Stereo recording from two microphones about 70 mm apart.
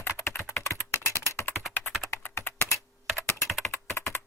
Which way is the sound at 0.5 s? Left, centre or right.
Left.